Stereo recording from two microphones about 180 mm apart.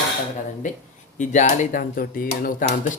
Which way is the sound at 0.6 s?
45° left (ahead or behind).